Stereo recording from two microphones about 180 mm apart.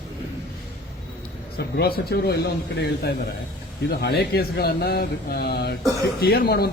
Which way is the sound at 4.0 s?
65° left (ahead or behind).